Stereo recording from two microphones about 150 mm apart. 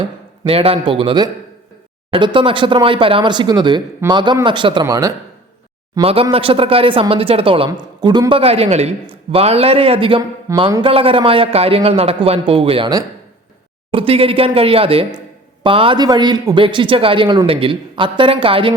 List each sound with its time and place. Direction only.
0.4 s a man's voice: 40° right (ahead or behind); by 5.1 s 25° right (ahead or behind)
6.0 s a man's voice: 40° right (ahead or behind)
8.4 s a man's voice: 45° right (ahead or behind)
13.9 s a man's voice: 40° right (ahead or behind)